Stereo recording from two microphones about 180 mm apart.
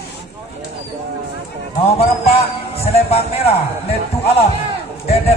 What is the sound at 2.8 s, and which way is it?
Music, 35° left (ahead or behind).